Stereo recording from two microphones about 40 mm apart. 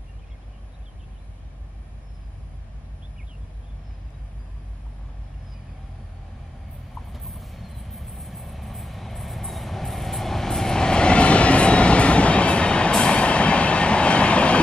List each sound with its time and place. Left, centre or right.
7.1 s vehicle: centre; by 14.6 s left